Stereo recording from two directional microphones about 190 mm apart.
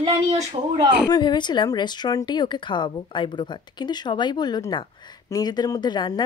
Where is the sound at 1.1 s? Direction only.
25° left (ahead or behind).